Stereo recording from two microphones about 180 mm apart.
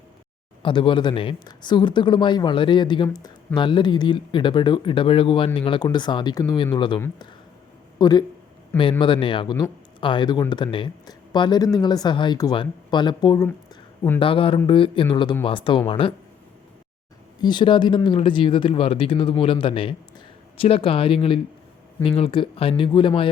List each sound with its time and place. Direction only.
0.6 s speech: 30° left (ahead or behind)
17.4 s speech: 25° left (ahead or behind)